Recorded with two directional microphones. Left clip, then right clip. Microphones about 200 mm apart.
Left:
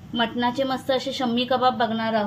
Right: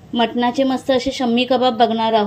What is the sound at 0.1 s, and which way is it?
A woman's voice, 25° right (ahead or behind).